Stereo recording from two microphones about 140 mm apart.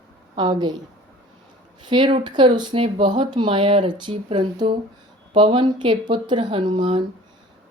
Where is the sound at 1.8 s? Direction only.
35° right (ahead or behind).